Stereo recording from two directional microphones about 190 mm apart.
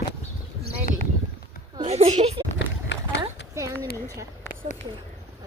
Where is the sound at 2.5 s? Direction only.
70° left (ahead or behind).